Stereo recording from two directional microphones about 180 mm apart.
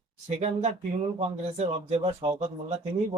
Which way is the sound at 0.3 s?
35° right (ahead or behind).